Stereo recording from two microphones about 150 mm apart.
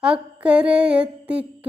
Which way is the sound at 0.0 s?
5° right (ahead or behind).